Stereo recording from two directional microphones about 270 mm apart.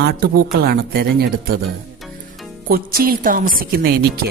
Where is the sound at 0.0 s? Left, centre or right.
Right.